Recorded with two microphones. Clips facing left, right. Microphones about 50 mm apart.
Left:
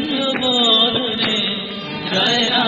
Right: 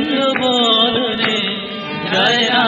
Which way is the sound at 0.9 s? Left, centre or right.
Right.